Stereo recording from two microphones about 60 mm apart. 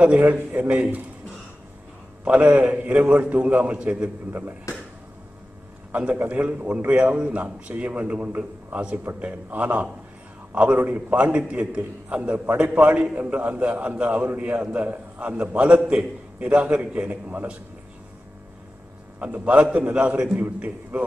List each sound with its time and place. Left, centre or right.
0.2 s a man's voice: right
2.2 s a man's voice: right
4.3 s a man's voice: right
5.9 s a man's voice: centre
19.1 s a man's voice: right